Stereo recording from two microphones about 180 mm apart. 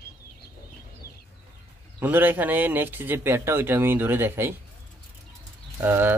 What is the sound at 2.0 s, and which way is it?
Speech, 10° right (ahead or behind).